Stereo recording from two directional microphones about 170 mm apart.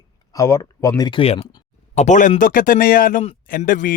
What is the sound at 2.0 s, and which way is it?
Speech, 45° left (ahead or behind).